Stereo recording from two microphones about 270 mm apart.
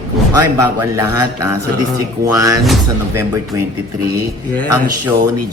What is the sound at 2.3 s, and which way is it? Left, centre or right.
Speech, centre.